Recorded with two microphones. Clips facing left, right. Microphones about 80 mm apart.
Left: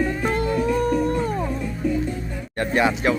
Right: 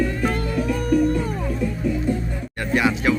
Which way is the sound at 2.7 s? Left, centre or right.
Left.